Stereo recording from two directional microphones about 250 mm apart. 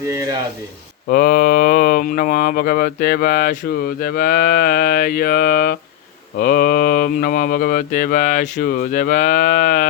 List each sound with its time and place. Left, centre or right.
0.1 s speech: centre
1.0 s speech: left